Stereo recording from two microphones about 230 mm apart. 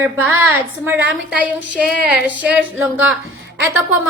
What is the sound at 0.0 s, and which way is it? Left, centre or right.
A woman's voice, centre.